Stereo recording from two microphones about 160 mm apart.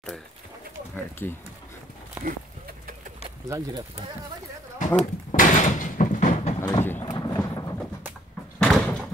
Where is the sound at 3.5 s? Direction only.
20° right (ahead or behind).